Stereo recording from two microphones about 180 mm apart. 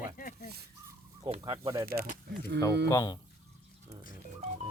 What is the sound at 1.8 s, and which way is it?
Speech, 55° right (ahead or behind).